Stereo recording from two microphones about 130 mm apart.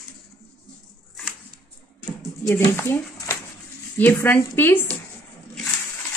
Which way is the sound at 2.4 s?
15° left (ahead or behind).